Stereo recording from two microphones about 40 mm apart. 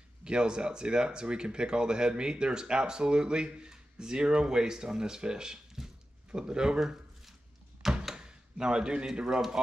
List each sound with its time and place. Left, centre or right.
0.2 s speech: right
6.8 s a sound: centre
7.8 s door: centre
8.2 s speech: right